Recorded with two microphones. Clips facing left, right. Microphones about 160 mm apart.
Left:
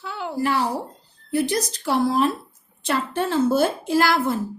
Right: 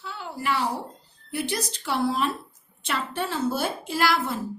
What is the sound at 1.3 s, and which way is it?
A woman's voice, 40° left (ahead or behind).